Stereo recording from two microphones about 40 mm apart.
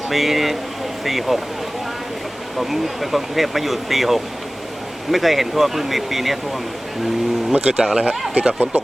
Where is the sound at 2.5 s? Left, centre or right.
Centre.